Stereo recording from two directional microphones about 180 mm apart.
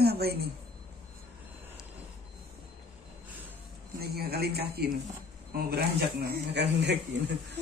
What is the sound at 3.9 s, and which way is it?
Speech, 60° right (ahead or behind).